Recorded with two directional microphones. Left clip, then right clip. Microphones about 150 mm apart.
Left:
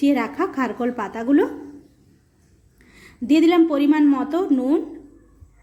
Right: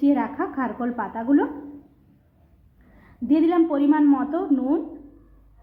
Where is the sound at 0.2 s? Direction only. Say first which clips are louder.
Left 3 dB; 35° left (ahead or behind).